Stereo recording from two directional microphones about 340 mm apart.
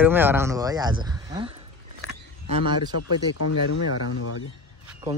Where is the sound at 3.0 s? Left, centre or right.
Left.